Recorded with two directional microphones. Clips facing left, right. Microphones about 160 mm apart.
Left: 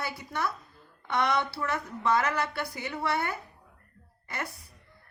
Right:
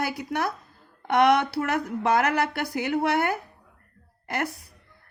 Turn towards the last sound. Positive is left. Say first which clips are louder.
# right 8 dB
turn(degrees=-75)  # may be behind; listen again after turning